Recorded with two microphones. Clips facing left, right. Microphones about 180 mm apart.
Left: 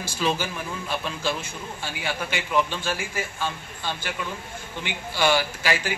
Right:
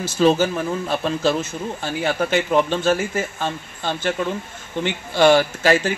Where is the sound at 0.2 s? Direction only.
40° right (ahead or behind).